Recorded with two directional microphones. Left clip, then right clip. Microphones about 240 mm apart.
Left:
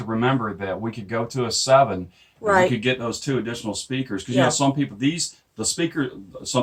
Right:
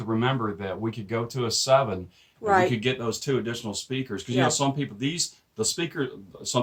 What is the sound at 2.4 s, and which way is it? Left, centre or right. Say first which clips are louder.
Speech: left 3 dB; centre.